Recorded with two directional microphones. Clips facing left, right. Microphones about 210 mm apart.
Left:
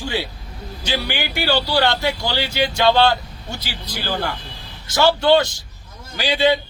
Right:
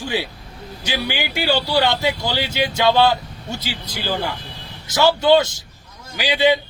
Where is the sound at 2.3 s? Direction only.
20° right (ahead or behind).